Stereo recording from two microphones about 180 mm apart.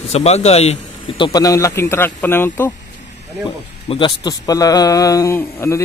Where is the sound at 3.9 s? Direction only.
25° left (ahead or behind).